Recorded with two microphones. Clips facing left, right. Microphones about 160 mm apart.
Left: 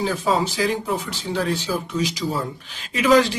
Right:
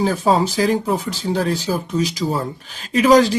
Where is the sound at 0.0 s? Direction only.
45° right (ahead or behind).